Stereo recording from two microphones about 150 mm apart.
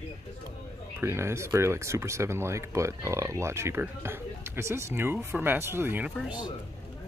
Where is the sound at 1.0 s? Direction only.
15° right (ahead or behind).